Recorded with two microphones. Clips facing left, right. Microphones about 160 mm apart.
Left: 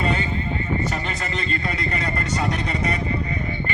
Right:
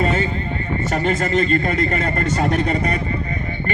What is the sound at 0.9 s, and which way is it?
Speech, 45° right (ahead or behind).